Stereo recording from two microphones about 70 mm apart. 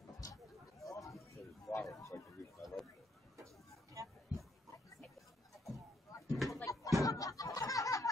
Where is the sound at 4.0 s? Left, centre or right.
Right.